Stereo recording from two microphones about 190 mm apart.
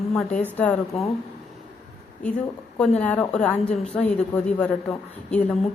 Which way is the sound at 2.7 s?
5° left (ahead or behind).